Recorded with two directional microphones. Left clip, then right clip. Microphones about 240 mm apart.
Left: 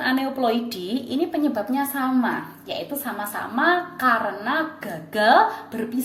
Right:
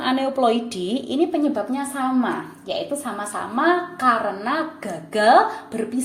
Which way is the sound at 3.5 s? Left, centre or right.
Centre.